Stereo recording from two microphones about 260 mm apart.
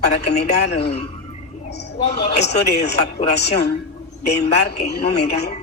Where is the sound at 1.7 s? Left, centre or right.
Left.